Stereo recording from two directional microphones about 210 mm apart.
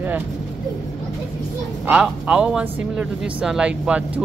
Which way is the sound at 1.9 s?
5° right (ahead or behind).